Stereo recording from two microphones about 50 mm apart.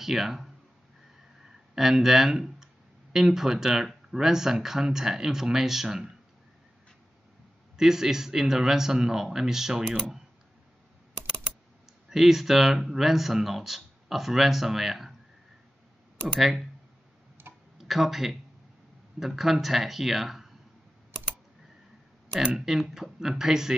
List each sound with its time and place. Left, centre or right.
0.0 s speech: centre
1.8 s speech: centre
7.7 s speech: centre
12.1 s speech: centre
16.3 s speech: centre
17.4 s tick-tock: right
17.7 s speech: centre
22.7 s speech: centre